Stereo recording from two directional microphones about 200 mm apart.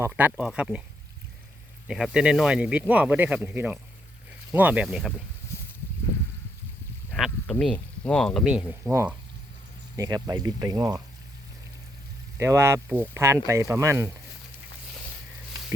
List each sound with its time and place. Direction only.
0.0 s speech: 10° right (ahead or behind)
1.9 s speech: 5° right (ahead or behind)
5.5 s a sound: 15° left (ahead or behind)
7.1 s speech: 5° left (ahead or behind); by 11.0 s 20° right (ahead or behind)
12.4 s speech: 15° right (ahead or behind)